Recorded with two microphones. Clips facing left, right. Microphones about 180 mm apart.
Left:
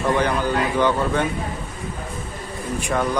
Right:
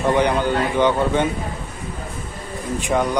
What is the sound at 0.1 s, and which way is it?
Speech, 20° right (ahead or behind).